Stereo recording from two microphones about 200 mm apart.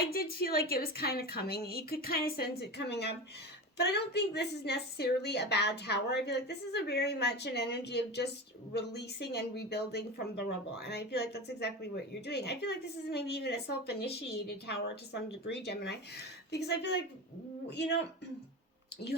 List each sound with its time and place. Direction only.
0.1 s a woman's voice: 50° left (ahead or behind)